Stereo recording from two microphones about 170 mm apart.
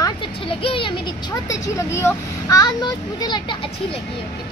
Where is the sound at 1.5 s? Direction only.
15° left (ahead or behind).